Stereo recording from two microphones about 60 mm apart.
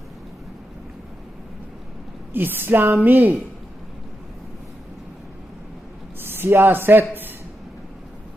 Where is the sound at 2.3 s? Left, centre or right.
Right.